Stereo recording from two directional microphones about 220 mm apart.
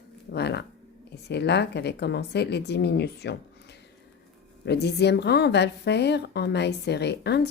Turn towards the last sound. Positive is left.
turn(degrees=50)  # may be behind; listen again after turning